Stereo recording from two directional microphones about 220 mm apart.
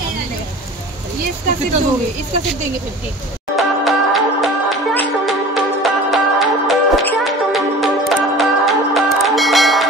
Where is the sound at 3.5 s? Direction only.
Centre (ahead or behind).